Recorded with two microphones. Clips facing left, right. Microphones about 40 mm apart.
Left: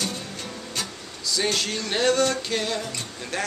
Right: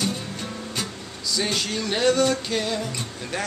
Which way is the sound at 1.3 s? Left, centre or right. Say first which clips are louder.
Even; centre.